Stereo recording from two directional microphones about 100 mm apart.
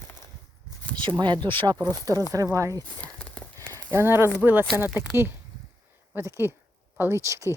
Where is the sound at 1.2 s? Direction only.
50° right (ahead or behind).